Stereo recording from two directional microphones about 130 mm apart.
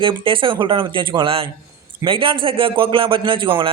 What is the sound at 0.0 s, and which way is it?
Speech, 40° right (ahead or behind).